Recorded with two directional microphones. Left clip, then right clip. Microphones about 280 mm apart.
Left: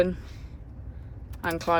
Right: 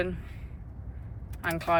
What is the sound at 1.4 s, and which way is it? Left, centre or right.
Speech, centre.